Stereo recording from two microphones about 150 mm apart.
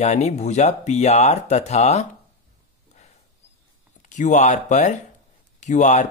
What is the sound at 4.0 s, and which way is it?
Speech, 55° left (ahead or behind).